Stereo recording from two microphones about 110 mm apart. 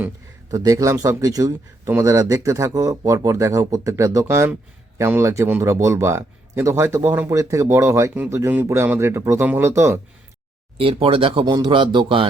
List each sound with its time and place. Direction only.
0.5 s speech: 30° right (ahead or behind)
10.8 s speech: 60° right (ahead or behind)
11.4 s a man's voice: 40° right (ahead or behind)